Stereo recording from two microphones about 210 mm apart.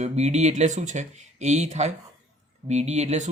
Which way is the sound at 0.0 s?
30° right (ahead or behind).